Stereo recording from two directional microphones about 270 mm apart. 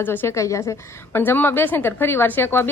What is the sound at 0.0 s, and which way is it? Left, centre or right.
A woman's voice, centre.